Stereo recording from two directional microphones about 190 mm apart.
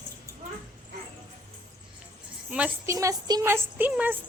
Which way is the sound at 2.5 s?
10° right (ahead or behind).